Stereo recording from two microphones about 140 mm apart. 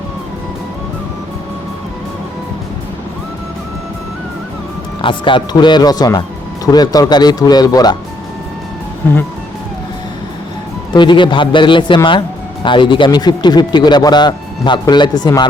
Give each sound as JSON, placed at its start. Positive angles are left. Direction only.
{"t": 5.0, "sound": "speech", "side_deg": 35}
{"t": 10.9, "sound": "speech", "side_deg": 35}